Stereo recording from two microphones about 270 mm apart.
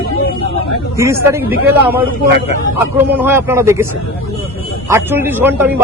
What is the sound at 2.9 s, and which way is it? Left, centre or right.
Speech, centre.